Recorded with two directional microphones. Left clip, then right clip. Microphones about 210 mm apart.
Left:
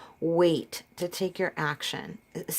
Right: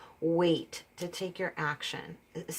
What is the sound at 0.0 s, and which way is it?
Speech, 40° left (ahead or behind).